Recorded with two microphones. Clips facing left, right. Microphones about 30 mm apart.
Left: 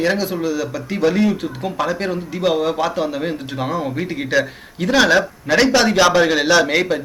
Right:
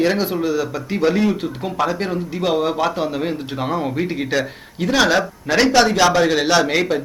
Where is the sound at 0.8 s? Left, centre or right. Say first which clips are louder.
Left 1 dB; centre.